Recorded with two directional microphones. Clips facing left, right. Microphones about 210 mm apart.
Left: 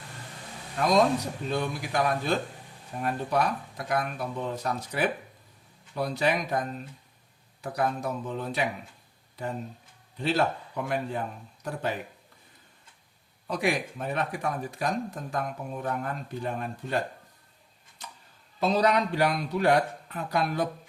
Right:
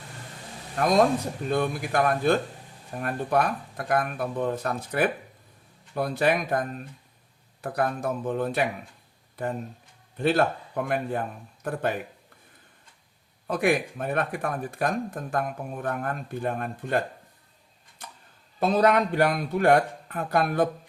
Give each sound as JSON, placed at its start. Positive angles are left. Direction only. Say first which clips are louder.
{"t": 0.8, "sound": "speech", "louder": "right 2 dB", "side_deg": -55}
{"t": 13.5, "sound": "speech", "louder": "right 4 dB", "side_deg": -55}
{"t": 18.6, "sound": "speech", "louder": "right 3 dB", "side_deg": -50}